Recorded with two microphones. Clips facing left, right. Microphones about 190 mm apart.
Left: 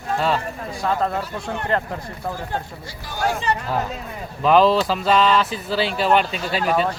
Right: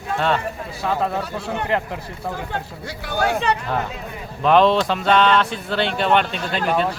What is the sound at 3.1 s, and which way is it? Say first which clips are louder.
Speech: right 2 dB; 65° right (ahead or behind).